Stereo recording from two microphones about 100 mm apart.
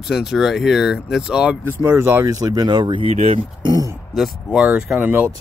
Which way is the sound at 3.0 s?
75° right (ahead or behind).